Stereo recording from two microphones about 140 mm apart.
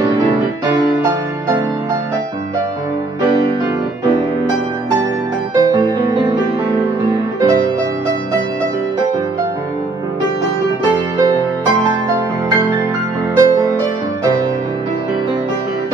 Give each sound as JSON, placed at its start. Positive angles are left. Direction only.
{"t": 5.6, "sound": "music", "side_deg": -25}
{"t": 13.4, "sound": "music", "side_deg": -25}